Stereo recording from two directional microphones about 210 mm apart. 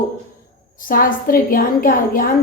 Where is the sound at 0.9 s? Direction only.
40° left (ahead or behind).